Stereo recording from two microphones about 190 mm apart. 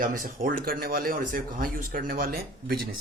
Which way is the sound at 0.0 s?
45° right (ahead or behind).